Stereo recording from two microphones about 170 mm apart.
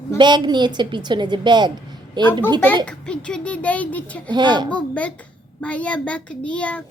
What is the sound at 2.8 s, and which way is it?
A child's voice, 5° left (ahead or behind).